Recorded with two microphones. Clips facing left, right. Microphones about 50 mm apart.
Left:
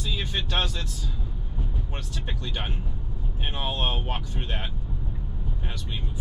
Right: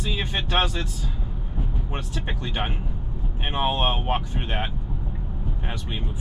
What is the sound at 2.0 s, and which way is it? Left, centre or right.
Speech, right.